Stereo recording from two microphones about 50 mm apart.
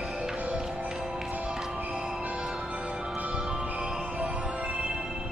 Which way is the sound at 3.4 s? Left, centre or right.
Centre.